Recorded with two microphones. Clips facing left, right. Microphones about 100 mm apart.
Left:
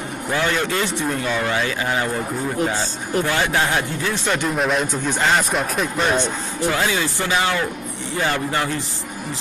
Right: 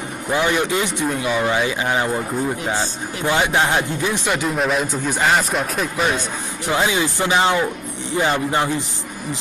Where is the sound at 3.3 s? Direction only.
20° right (ahead or behind).